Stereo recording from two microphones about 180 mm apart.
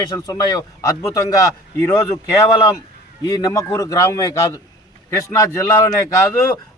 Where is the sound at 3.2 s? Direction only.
20° left (ahead or behind).